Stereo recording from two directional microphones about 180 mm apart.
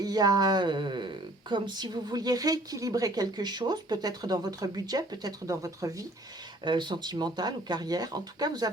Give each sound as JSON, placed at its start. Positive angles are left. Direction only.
{"t": 0.0, "sound": "a woman's voice", "side_deg": -20}